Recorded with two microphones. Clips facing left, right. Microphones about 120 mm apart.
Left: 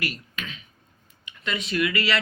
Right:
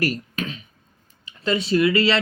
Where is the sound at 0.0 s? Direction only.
40° right (ahead or behind).